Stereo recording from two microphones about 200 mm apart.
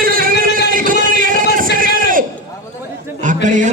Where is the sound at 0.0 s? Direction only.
45° right (ahead or behind).